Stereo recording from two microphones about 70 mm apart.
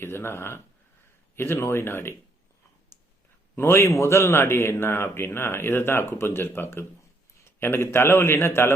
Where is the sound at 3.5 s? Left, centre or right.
Left.